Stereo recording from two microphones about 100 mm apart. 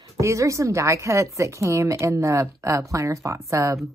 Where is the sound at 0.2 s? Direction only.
30° right (ahead or behind).